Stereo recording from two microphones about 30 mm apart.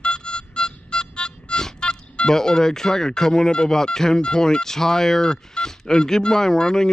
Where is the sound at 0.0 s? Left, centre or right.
Left.